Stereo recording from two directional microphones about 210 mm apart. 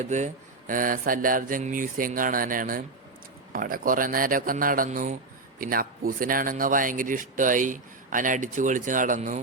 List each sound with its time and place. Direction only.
0.0 s speech: 35° right (ahead or behind)